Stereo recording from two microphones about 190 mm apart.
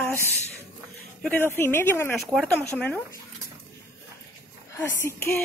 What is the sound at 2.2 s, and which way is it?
Speech, centre (ahead or behind).